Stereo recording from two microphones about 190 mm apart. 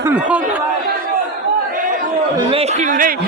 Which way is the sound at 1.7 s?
45° right (ahead or behind).